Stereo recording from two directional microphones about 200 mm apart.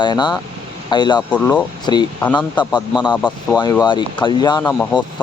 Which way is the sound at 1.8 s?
20° left (ahead or behind).